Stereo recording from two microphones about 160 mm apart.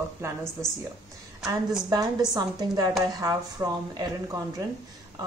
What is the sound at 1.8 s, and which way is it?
A woman's voice, 25° right (ahead or behind).